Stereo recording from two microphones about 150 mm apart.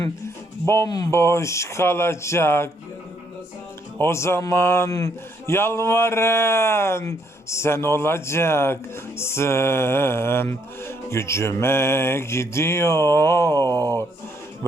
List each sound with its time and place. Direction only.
0.7 s speech: 20° left (ahead or behind)
3.9 s speech: 15° left (ahead or behind)